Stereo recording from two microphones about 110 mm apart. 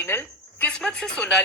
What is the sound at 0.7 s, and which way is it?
Speech, 10° left (ahead or behind).